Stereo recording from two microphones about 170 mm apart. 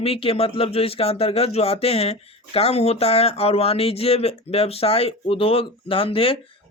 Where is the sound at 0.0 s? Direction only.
35° left (ahead or behind).